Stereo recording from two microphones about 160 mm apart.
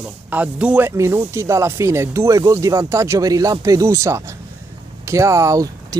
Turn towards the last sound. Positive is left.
turn(degrees=-20)  # may be behind; listen again after turning